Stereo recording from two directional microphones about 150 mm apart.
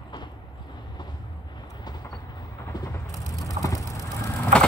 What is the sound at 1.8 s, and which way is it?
Train, 30° left (ahead or behind).